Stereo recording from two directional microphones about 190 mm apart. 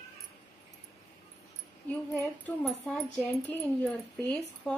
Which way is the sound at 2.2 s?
5° left (ahead or behind).